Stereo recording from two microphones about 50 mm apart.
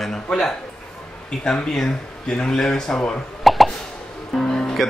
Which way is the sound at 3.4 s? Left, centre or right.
Centre.